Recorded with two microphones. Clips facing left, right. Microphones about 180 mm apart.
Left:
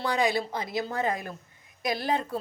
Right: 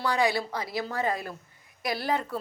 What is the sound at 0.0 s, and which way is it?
Speech, 20° left (ahead or behind).